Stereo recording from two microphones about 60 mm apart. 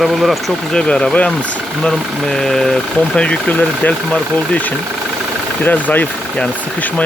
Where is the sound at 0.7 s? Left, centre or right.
Centre.